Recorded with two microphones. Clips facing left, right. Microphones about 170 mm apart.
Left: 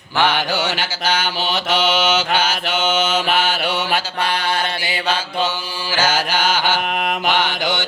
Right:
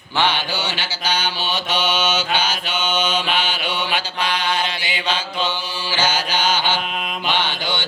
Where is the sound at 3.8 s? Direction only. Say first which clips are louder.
Left 2 dB; 50° left (ahead or behind).